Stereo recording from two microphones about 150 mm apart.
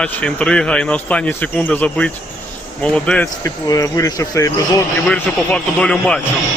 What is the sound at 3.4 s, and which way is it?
Speech, 20° left (ahead or behind).